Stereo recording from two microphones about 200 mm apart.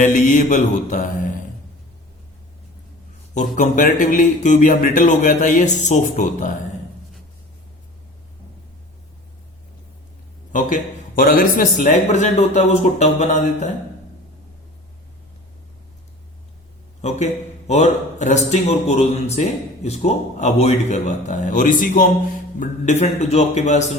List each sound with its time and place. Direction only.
0.0 s a man's voice: 40° left (ahead or behind)
3.3 s a man's voice: 40° left (ahead or behind)
10.5 s a man's voice: 40° left (ahead or behind)
17.0 s a man's voice: 35° left (ahead or behind)